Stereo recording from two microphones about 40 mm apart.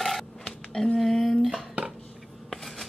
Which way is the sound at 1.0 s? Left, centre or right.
Centre.